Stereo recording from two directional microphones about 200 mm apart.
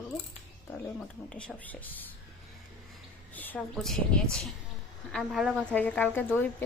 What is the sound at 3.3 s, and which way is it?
A woman's voice, 10° left (ahead or behind).